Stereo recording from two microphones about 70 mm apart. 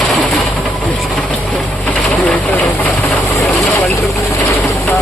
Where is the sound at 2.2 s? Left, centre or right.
Left.